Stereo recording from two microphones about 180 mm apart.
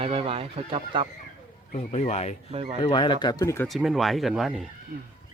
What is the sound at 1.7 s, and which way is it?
Speech, 40° left (ahead or behind).